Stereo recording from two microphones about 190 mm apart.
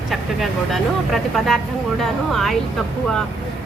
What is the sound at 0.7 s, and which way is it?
A woman's voice, centre (ahead or behind).